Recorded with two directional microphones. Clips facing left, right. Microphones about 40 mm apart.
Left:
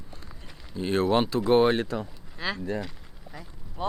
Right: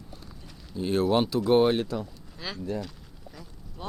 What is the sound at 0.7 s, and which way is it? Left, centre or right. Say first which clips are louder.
Speech: even; left.